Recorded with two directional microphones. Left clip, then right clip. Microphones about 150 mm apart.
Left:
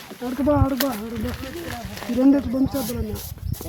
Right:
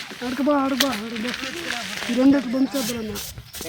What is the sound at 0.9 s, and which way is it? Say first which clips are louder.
Speech: right 3 dB; 30° left (ahead or behind).